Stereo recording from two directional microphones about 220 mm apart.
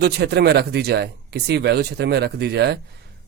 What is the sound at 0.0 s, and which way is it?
Speech, 50° right (ahead or behind).